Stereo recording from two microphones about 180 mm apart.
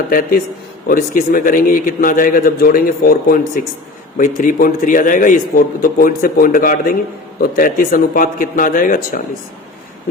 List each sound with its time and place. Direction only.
0.1 s a man's voice: 50° left (ahead or behind)